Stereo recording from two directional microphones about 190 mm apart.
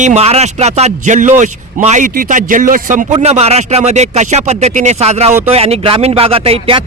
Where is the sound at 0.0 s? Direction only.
35° right (ahead or behind).